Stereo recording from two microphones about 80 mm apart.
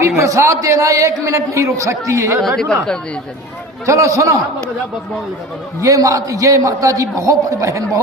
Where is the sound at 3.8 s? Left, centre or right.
Right.